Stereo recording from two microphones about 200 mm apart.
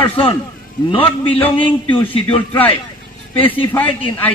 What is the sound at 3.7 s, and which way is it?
Speech, 10° left (ahead or behind).